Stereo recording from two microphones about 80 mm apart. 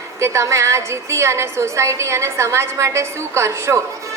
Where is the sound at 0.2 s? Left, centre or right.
Right.